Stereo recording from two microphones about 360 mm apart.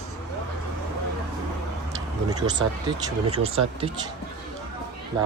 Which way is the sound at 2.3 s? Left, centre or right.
Centre.